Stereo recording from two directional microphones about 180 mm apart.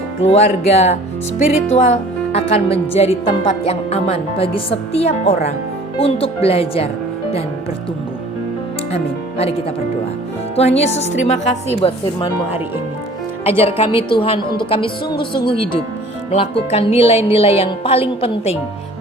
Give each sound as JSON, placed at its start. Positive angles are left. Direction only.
{"t": 0.2, "sound": "speech", "side_deg": 35}
{"t": 10.5, "sound": "speech", "side_deg": 35}
{"t": 13.4, "sound": "speech", "side_deg": -10}
{"t": 13.7, "sound": "speech", "side_deg": 30}